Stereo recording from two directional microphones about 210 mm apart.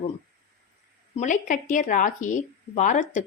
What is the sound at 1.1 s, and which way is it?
A woman's voice, 35° left (ahead or behind).